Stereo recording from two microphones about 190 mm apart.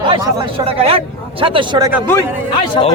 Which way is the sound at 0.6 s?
30° right (ahead or behind).